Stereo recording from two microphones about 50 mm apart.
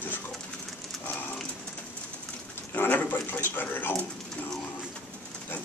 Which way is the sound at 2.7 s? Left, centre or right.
Left.